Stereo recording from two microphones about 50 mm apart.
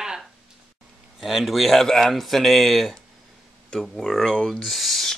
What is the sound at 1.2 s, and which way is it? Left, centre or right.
Speech, centre.